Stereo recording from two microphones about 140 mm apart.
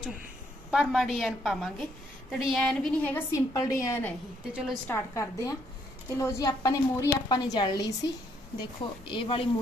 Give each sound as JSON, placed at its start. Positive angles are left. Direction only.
{"t": 0.7, "sound": "a woman's voice", "side_deg": 0}
{"t": 3.3, "sound": "a woman's voice", "side_deg": 25}